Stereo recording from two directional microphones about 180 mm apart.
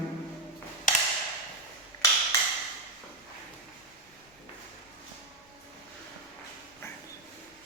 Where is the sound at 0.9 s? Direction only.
45° left (ahead or behind).